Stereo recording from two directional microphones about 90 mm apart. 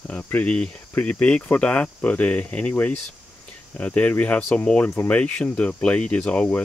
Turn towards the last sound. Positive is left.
turn(degrees=10)  # may be behind; listen again after turning